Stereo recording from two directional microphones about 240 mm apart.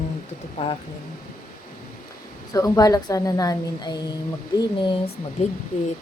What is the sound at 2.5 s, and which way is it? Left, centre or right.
A woman's voice, centre.